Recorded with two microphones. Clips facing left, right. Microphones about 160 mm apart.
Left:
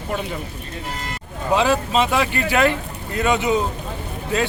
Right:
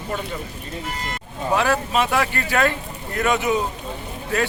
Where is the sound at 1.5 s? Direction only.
20° left (ahead or behind).